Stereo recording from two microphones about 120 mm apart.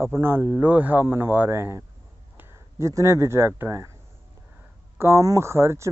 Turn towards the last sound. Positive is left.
turn(degrees=-20)  # may be behind; listen again after turning